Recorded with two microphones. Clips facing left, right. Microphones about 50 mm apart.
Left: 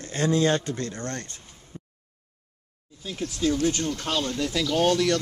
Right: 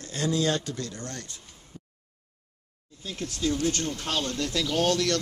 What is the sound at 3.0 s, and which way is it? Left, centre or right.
Speech, centre.